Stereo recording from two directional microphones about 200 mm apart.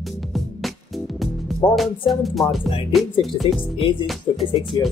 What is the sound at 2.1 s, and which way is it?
Speech, centre (ahead or behind).